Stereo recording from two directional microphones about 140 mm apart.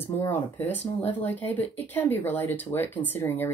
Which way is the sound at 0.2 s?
15° left (ahead or behind).